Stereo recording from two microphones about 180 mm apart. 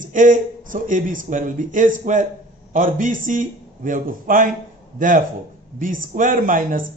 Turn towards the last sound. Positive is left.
turn(degrees=-50)  # may be behind; listen again after turning